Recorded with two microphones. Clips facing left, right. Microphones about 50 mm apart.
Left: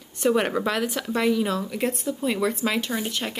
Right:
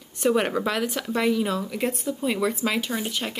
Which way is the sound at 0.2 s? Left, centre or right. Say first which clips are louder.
Even; centre.